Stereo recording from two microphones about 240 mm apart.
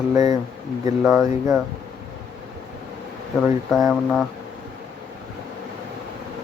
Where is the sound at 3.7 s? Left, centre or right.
Centre.